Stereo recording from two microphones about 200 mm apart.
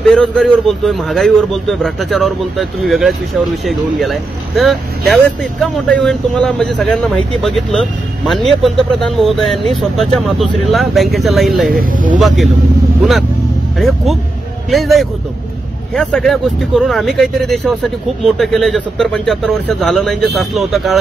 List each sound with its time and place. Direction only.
0.1 s speech: 5° left (ahead or behind)
11.8 s speech: 40° right (ahead or behind)
13.7 s speech: centre (ahead or behind)